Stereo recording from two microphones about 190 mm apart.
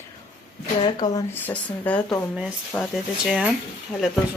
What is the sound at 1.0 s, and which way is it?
Speech, 20° left (ahead or behind).